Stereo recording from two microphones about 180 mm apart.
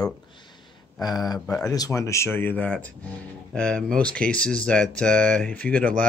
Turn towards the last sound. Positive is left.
turn(degrees=5)  # may be behind; listen again after turning